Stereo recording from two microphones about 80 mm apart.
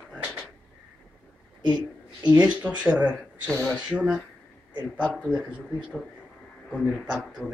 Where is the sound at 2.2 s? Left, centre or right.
Centre.